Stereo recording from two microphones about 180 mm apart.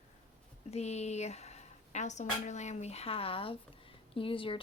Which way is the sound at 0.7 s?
35° left (ahead or behind).